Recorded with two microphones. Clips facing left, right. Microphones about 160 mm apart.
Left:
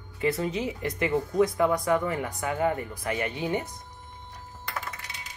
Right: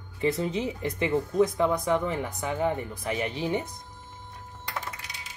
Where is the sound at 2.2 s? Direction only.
5° left (ahead or behind).